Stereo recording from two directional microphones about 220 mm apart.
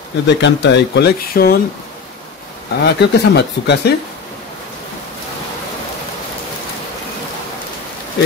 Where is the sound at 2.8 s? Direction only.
50° left (ahead or behind).